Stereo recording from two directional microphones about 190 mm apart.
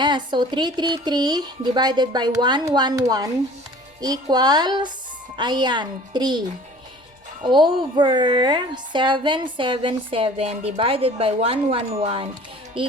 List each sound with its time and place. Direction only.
0.0 s a woman's voice: 25° right (ahead or behind)
7.4 s a woman's voice: 25° right (ahead or behind)